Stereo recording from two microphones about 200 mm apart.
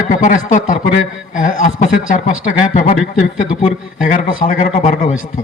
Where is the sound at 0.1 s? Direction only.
40° left (ahead or behind).